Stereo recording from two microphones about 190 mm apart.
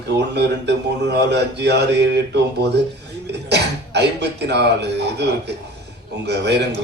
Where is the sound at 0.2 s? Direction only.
65° right (ahead or behind).